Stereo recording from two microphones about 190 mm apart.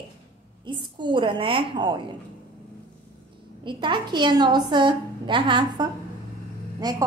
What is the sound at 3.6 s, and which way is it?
A woman's voice, 25° right (ahead or behind).